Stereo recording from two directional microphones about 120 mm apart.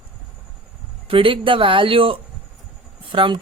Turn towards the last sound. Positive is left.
turn(degrees=-45)  # may be behind; listen again after turning